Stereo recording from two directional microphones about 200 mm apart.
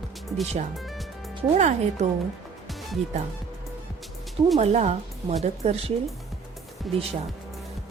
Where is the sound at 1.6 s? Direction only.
35° right (ahead or behind).